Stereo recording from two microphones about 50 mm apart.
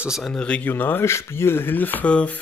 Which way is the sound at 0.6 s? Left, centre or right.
Left.